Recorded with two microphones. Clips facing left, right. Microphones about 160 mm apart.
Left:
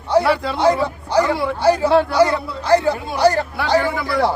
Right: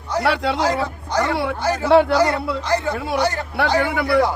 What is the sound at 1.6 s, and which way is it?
Speech, 30° left (ahead or behind).